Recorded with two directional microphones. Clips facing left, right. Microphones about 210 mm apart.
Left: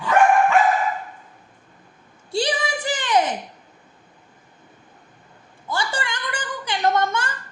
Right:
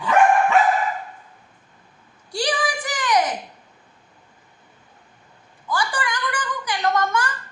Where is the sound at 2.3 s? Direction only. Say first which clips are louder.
Left 1 dB; 25° left (ahead or behind).